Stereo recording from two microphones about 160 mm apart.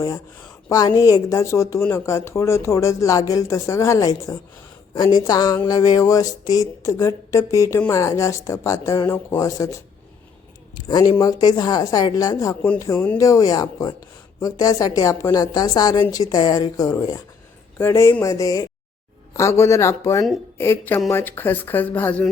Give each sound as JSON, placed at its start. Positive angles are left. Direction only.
{"t": 0.7, "sound": "speech", "side_deg": 20}